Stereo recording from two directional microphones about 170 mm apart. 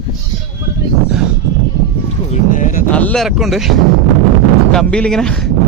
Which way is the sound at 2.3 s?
45° left (ahead or behind).